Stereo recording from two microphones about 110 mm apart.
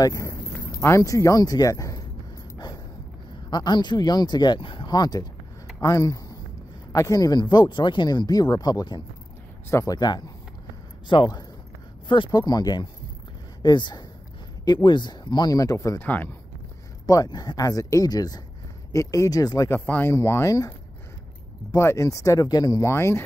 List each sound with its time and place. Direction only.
0.0 s speech: 30° left (ahead or behind)
3.4 s speech: 40° left (ahead or behind)
9.7 s speech: 25° left (ahead or behind)
9.9 s speech: 40° left (ahead or behind)
16.0 s a man's voice: 15° left (ahead or behind)
17.0 s speech: 35° left (ahead or behind)
19.7 s speech: 20° left (ahead or behind)
21.7 s speech: 25° left (ahead or behind)
22.8 s speech: 25° left (ahead or behind)